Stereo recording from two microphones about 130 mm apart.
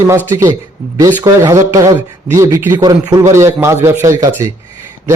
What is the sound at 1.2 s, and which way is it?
A man's voice, 30° right (ahead or behind).